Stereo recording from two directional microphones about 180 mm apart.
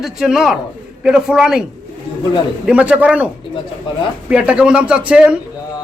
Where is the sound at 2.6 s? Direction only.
5° right (ahead or behind).